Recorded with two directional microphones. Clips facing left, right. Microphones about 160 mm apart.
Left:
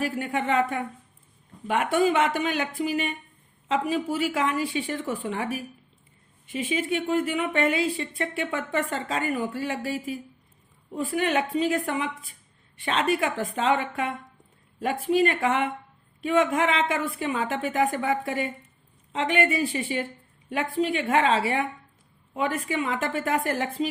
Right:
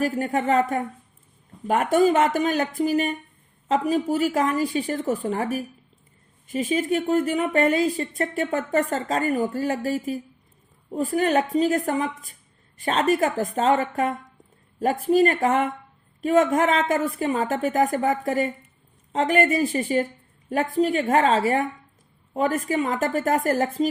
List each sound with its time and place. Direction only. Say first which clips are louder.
0.0 s speech: right 4 dB; 40° right (ahead or behind)